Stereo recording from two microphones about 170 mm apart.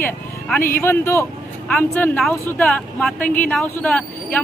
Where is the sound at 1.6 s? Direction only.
5° left (ahead or behind).